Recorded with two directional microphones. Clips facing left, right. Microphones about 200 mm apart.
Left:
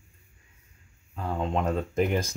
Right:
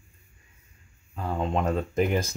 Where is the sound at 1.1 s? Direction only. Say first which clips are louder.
Right 1 dB; 5° right (ahead or behind).